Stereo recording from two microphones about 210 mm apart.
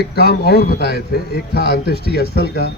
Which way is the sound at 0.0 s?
50° left (ahead or behind).